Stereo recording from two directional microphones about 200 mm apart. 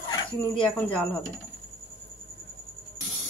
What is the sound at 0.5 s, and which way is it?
Speech, 5° left (ahead or behind).